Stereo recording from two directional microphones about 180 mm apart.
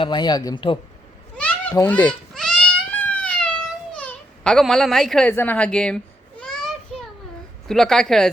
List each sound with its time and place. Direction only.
0.0 s speech: 25° left (ahead or behind)
1.4 s children playing: 5° left (ahead or behind)
1.7 s a sound: 10° left (ahead or behind)
3.9 s baby cry: 5° left (ahead or behind)
5.3 s children playing: 10° left (ahead or behind)
7.7 s a woman's voice: centre (ahead or behind)